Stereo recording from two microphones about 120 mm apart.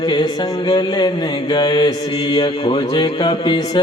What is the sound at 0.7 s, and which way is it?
Music, 35° left (ahead or behind).